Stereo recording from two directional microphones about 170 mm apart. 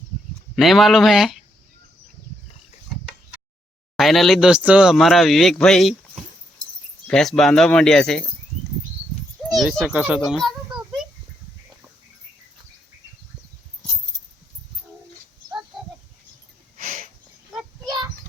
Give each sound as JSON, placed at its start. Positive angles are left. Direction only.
{"t": 0.5, "sound": "speech", "side_deg": 0}
{"t": 3.9, "sound": "speech", "side_deg": 0}
{"t": 7.1, "sound": "speech", "side_deg": 5}
{"t": 9.7, "sound": "a child's voice", "side_deg": -5}
{"t": 16.7, "sound": "a sound", "side_deg": -55}